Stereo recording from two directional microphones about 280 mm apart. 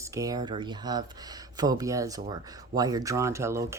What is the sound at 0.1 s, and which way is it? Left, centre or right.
Speech, centre.